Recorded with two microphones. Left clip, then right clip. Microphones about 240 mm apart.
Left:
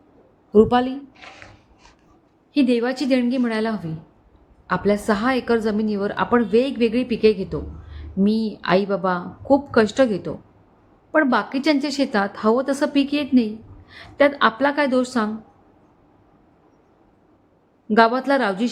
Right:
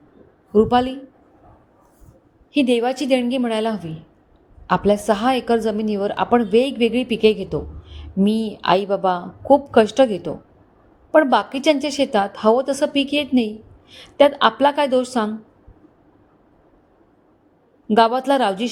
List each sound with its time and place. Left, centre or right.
0.5 s speech: centre
2.5 s a woman's voice: centre
17.8 s a woman's voice: centre